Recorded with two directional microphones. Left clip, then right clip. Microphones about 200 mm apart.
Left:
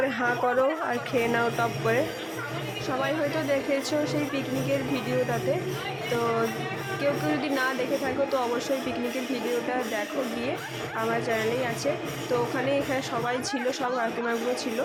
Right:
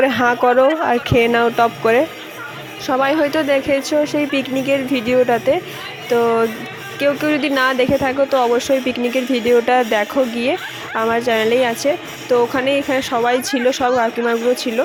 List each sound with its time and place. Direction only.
0.0 s speech: 45° right (ahead or behind)
7.0 s speech: 40° right (ahead or behind)